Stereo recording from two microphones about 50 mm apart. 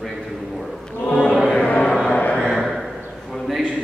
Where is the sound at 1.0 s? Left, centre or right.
Centre.